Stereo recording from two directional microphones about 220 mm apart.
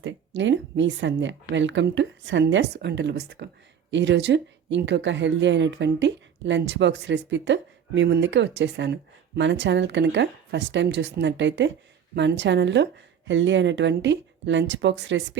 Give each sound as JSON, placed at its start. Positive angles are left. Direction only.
{"t": 0.0, "sound": "speech", "side_deg": -55}